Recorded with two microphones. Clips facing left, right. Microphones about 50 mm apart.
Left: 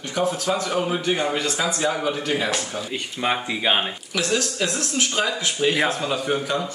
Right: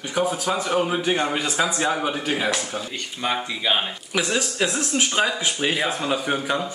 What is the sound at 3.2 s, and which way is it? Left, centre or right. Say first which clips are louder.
Speech: left 2 dB; centre.